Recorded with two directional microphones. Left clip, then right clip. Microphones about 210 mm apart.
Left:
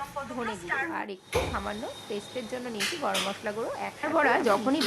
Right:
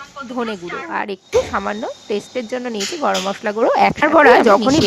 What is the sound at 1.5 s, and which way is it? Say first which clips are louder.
Speech: right 12 dB; 50° right (ahead or behind).